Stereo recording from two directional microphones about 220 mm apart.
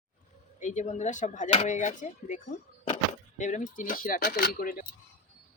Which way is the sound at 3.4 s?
35° left (ahead or behind).